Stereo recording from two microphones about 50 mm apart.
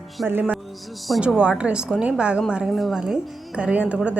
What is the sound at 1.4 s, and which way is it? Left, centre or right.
A woman's voice, right.